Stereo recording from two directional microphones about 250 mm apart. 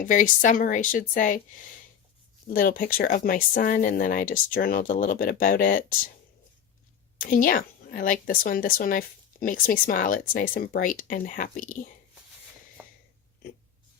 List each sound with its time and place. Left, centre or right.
0.0 s speech: left
2.5 s speech: left
7.2 s speech: left
12.8 s a sound: centre